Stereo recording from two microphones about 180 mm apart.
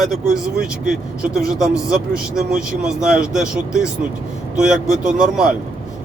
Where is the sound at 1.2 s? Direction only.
5° right (ahead or behind).